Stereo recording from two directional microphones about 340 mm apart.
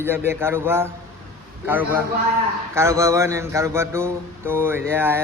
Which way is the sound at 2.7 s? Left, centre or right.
Centre.